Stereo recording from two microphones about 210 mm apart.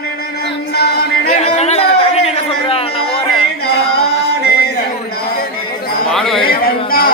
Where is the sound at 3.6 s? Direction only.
50° left (ahead or behind).